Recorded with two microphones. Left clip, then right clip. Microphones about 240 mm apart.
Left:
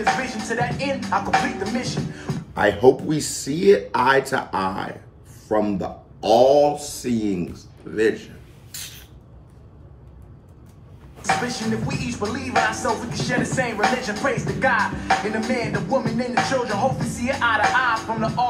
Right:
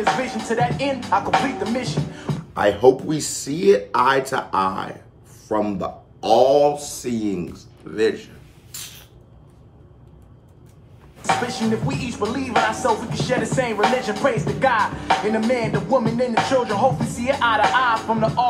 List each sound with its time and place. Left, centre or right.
0.0 s music: right
2.5 s speech: centre
8.7 s spray: centre
11.2 s music: right